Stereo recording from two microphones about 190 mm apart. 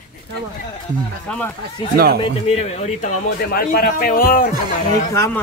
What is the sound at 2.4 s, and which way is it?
Speech, 35° left (ahead or behind).